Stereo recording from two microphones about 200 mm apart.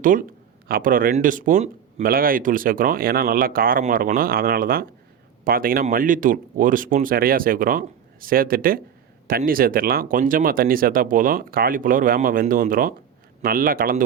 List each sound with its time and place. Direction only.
0.0 s speech: 45° right (ahead or behind)